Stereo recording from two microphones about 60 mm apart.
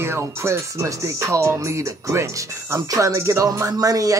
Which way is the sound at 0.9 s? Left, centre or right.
Right.